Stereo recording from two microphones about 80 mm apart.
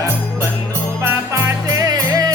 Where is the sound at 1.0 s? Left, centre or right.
Right.